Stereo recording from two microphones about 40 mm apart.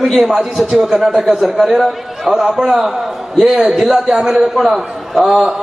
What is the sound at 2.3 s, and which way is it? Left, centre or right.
A man's voice, centre.